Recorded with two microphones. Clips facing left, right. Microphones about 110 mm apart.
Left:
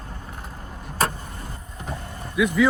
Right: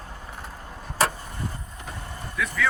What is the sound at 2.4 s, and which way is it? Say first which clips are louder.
Speech: left 8 dB; 15° left (ahead or behind).